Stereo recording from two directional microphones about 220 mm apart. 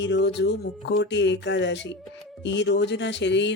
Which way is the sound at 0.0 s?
55° left (ahead or behind).